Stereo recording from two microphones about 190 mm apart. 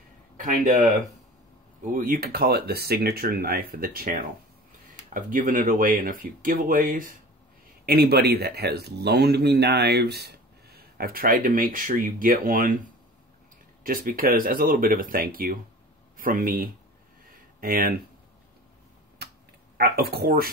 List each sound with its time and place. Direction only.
0.4 s speech: 45° right (ahead or behind)
2.0 s speech: 50° right (ahead or behind)
19.8 s speech: 55° right (ahead or behind)